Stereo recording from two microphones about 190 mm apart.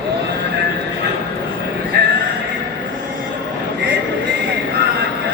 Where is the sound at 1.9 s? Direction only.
55° right (ahead or behind).